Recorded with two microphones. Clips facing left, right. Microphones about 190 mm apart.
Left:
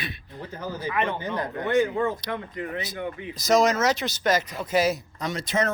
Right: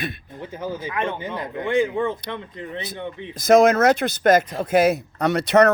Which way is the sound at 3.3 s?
55° right (ahead or behind).